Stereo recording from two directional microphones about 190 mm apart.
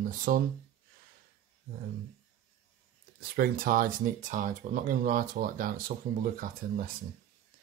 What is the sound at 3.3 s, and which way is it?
Speech, 50° right (ahead or behind).